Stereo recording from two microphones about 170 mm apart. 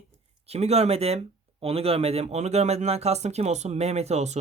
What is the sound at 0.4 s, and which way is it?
Speech, 40° right (ahead or behind).